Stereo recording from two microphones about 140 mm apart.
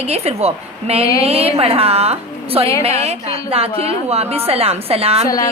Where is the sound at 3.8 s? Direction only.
45° right (ahead or behind).